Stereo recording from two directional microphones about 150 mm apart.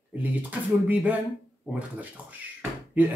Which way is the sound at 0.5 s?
10° right (ahead or behind).